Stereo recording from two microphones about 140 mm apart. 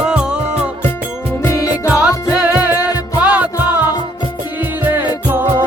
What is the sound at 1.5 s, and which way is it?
Music, 20° left (ahead or behind).